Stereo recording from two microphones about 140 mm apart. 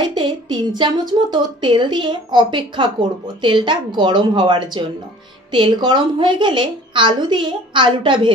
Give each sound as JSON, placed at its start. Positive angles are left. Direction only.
{"t": 0.0, "sound": "a woman's voice", "side_deg": -35}